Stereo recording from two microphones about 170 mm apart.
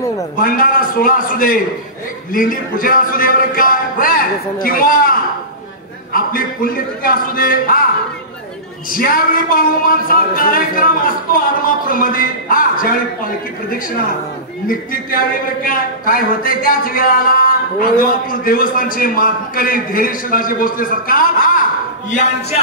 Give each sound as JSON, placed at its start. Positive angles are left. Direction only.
{"t": 0.4, "sound": "a man's voice", "side_deg": 55}
{"t": 8.9, "sound": "a man's voice", "side_deg": 55}
{"t": 14.7, "sound": "a man's voice", "side_deg": 60}